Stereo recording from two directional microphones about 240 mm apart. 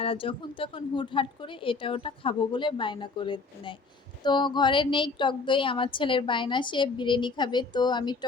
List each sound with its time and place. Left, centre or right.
0.0 s a woman's voice: left